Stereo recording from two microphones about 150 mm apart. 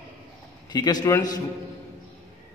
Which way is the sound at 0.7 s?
25° left (ahead or behind).